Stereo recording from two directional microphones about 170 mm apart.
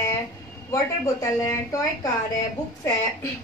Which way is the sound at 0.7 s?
20° left (ahead or behind).